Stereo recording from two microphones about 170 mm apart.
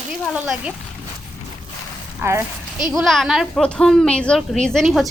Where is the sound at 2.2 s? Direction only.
15° right (ahead or behind).